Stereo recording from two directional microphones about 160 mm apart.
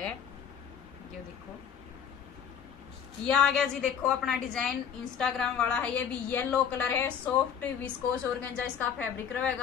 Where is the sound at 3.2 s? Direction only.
5° left (ahead or behind).